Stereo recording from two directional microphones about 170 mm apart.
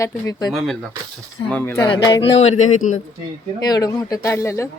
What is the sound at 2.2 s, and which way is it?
Speech, 35° left (ahead or behind).